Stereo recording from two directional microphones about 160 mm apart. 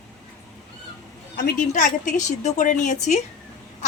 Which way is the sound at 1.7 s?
50° left (ahead or behind).